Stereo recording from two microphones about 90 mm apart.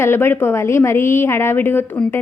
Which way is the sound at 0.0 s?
25° left (ahead or behind).